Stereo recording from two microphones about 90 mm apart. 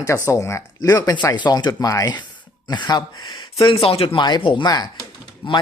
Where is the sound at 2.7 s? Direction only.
50° left (ahead or behind).